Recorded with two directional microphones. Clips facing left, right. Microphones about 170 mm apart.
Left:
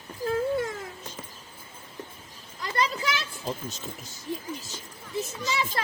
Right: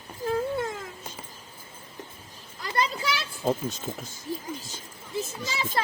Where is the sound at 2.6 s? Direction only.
30° right (ahead or behind).